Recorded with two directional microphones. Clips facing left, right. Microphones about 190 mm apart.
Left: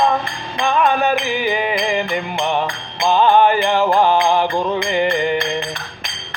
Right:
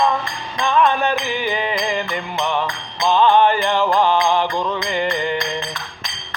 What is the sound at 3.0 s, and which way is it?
Music, 45° left (ahead or behind).